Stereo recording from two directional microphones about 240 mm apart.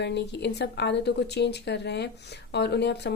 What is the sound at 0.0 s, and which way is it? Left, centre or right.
A woman's voice, left.